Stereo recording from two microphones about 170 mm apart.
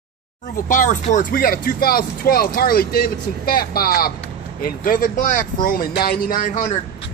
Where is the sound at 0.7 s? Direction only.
45° left (ahead or behind).